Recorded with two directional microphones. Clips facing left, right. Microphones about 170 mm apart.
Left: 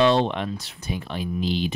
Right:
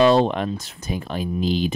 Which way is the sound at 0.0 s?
40° right (ahead or behind).